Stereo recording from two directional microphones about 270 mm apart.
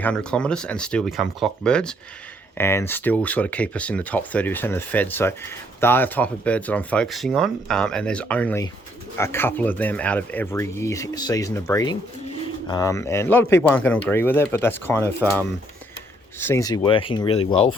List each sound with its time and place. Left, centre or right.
0.0 s speech: centre